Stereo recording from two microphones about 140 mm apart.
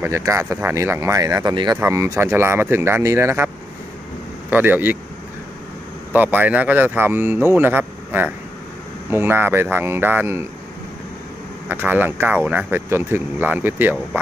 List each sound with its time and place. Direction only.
0.0 s speech: 20° right (ahead or behind)
1.8 s speech: 20° right (ahead or behind)
4.5 s speech: 10° right (ahead or behind)
6.1 s a man's voice: 10° right (ahead or behind)
11.7 s speech: 10° right (ahead or behind)